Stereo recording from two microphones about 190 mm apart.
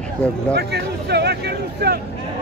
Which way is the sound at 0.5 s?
60° right (ahead or behind).